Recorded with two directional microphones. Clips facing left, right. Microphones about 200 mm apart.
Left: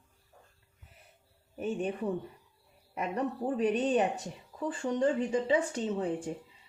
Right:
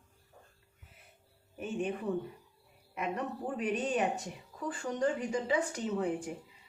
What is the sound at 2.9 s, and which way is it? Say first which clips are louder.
A woman's voice: left 3 dB; 35° left (ahead or behind).